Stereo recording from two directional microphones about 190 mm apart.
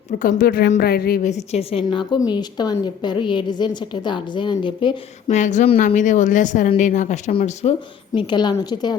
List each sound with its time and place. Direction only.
0.2 s a woman's voice: 45° left (ahead or behind)
1.3 s a woman's voice: 35° left (ahead or behind)
5.4 s speech: 40° left (ahead or behind)
8.1 s a woman's voice: 25° left (ahead or behind)